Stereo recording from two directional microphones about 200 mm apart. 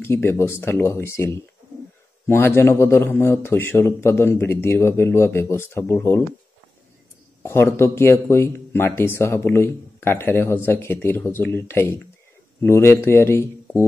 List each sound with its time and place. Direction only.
0.0 s a man's voice: 10° left (ahead or behind)
7.4 s a man's voice: 10° left (ahead or behind)